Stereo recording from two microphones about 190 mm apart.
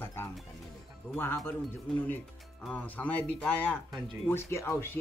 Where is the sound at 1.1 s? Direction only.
10° left (ahead or behind).